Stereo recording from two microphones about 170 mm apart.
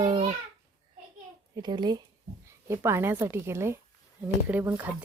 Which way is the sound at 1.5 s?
25° right (ahead or behind).